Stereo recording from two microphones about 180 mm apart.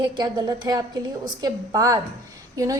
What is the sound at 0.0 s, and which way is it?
A woman's voice, 25° right (ahead or behind).